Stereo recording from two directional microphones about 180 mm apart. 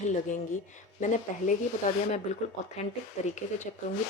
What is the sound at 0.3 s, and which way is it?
Speech, 45° left (ahead or behind).